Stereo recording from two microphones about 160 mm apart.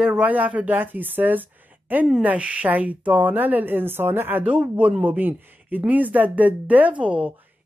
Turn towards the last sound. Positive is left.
turn(degrees=-10)  # may be behind; listen again after turning